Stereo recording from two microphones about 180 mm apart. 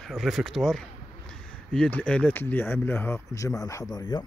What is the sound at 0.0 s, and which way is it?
Speech, centre (ahead or behind).